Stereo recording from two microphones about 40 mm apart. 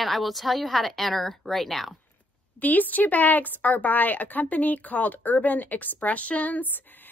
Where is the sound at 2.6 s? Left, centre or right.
Left.